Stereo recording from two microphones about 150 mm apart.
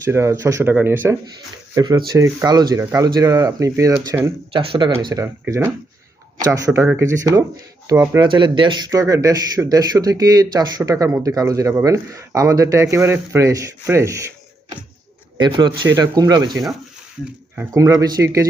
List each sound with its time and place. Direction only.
0.0 s speech: 20° right (ahead or behind)
1.7 s speech: 25° right (ahead or behind)
4.5 s speech: 35° right (ahead or behind)
5.1 s speech: 20° right (ahead or behind)
15.4 s speech: 30° right (ahead or behind)